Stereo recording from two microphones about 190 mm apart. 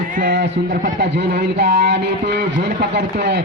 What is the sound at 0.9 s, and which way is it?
A man's voice, 55° right (ahead or behind).